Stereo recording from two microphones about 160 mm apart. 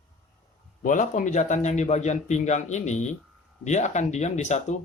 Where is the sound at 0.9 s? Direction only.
55° left (ahead or behind).